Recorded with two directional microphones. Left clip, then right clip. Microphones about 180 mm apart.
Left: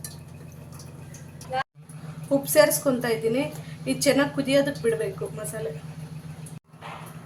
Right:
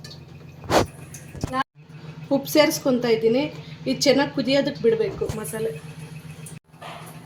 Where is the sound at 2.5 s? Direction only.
40° right (ahead or behind).